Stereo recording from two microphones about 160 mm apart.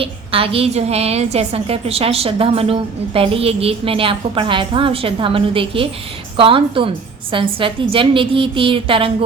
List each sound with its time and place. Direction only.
0.0 s a woman's voice: 35° right (ahead or behind)